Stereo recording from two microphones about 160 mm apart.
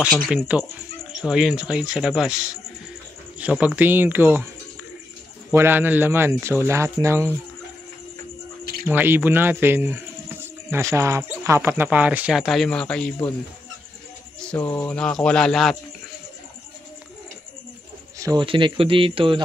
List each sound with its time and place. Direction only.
0.3 s speech: 5° right (ahead or behind)
3.3 s speech: 10° right (ahead or behind)
5.5 s speech: 15° right (ahead or behind)
8.8 s speech: 10° right (ahead or behind); by 13.3 s 5° left (ahead or behind)
14.4 s speech: 10° left (ahead or behind)
18.2 s speech: 30° right (ahead or behind)